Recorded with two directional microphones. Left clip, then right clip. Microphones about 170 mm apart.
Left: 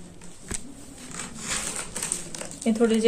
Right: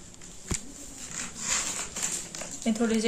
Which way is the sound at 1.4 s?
60° left (ahead or behind).